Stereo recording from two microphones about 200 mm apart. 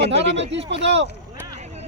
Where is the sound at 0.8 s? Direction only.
60° right (ahead or behind).